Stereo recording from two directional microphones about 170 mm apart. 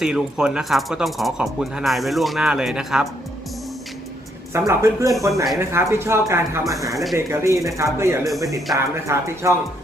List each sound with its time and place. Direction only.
0.0 s speech: 5° right (ahead or behind)
4.5 s speech: 15° right (ahead or behind)
6.9 s speech: centre (ahead or behind)
7.3 s speech: 20° right (ahead or behind)